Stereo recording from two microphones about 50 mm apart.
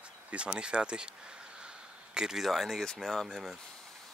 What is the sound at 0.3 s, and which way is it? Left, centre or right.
Speech, right.